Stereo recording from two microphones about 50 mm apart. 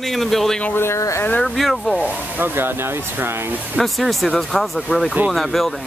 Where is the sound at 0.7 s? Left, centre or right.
Left.